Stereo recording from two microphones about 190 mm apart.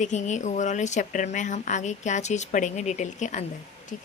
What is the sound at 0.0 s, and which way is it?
A woman's voice, 40° left (ahead or behind).